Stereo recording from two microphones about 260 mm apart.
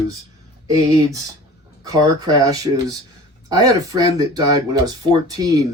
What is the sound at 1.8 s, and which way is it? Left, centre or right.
Speech, centre.